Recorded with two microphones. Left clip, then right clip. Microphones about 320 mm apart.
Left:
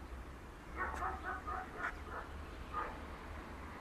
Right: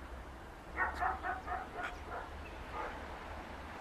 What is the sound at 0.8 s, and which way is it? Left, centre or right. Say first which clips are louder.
Vehicle: right 6 dB; right.